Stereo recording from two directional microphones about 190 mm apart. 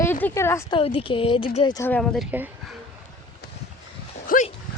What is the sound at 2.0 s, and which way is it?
Speech, centre (ahead or behind).